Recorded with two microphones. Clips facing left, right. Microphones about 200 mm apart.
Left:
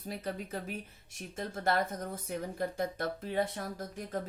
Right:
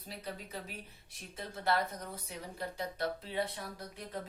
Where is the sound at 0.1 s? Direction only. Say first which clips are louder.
Left 6 dB; 50° left (ahead or behind).